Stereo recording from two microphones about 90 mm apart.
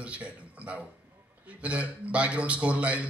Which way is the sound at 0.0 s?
15° right (ahead or behind).